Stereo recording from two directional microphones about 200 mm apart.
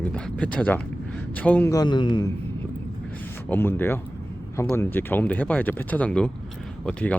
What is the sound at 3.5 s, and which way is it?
Speech, 10° left (ahead or behind).